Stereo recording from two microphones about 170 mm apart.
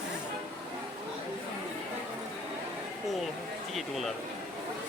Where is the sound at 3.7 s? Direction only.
Centre (ahead or behind).